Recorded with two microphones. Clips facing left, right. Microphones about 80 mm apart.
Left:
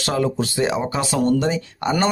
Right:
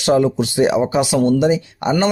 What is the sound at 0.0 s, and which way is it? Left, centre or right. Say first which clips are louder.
Speech: right 6 dB; right.